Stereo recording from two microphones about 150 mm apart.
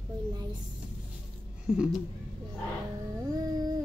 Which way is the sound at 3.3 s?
25° right (ahead or behind).